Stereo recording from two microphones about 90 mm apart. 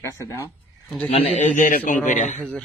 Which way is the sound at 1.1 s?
90° left.